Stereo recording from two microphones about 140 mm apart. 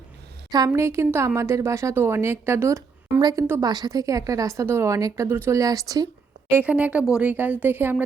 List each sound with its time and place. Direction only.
0.7 s a woman's voice: 20° right (ahead or behind)
6.5 s speech: 10° right (ahead or behind)